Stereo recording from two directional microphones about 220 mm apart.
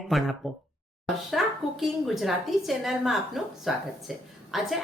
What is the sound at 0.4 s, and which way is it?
Speech, centre (ahead or behind).